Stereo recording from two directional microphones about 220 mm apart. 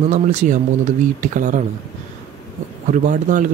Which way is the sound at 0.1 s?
35° right (ahead or behind).